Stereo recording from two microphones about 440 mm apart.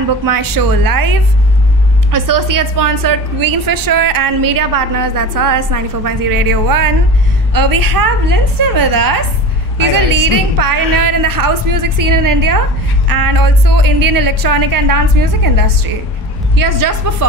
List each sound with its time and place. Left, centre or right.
0.2 s a woman's voice: right
2.0 s a woman's voice: right